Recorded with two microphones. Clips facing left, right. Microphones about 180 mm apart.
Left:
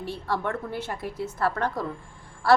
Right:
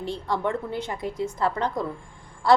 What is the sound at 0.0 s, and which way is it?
A woman's voice, 15° right (ahead or behind).